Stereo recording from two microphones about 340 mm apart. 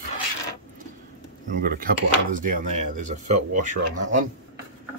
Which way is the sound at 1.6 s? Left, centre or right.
Right.